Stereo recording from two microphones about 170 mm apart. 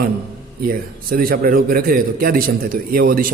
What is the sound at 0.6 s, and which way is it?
A man's voice, 60° right (ahead or behind).